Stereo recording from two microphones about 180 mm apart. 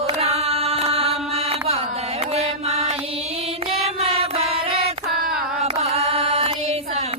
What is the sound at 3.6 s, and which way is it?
Music, 35° right (ahead or behind).